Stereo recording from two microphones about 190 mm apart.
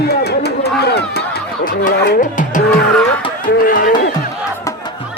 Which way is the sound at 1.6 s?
55° left (ahead or behind).